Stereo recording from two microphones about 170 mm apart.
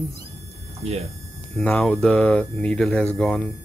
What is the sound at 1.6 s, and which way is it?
Speech, 5° left (ahead or behind).